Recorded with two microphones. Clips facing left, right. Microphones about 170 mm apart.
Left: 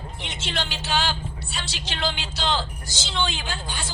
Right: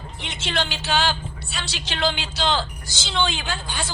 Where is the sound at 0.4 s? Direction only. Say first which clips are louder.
Right 4 dB; 80° right.